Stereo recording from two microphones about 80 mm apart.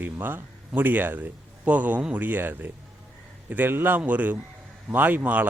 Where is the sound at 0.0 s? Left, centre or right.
Right.